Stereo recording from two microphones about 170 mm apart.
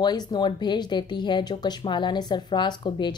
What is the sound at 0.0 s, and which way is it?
Speech, 25° left (ahead or behind).